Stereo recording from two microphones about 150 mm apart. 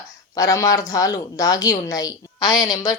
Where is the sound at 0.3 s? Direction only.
20° left (ahead or behind).